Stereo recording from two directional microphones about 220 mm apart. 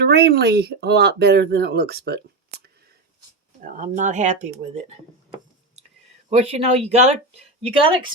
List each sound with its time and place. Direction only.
0.0 s speech: 45° right (ahead or behind)
3.6 s speech: 35° right (ahead or behind)
6.3 s speech: 30° right (ahead or behind)